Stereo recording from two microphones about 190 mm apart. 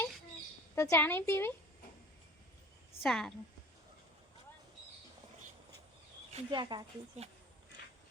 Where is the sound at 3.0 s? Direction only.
Centre (ahead or behind).